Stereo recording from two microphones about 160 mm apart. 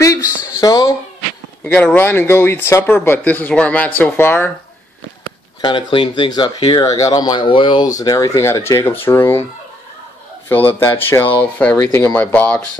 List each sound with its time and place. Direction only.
0.0 s a sound: 20° left (ahead or behind)
1.6 s speech: 10° left (ahead or behind)
5.6 s speech: 30° left (ahead or behind); by 9.5 s 15° left (ahead or behind)
10.8 s speech: 15° left (ahead or behind)